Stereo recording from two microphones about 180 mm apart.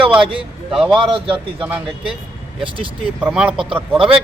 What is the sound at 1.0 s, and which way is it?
Speech, 30° right (ahead or behind).